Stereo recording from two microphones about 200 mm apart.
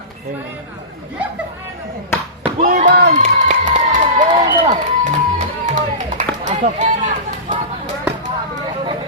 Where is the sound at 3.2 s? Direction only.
35° right (ahead or behind).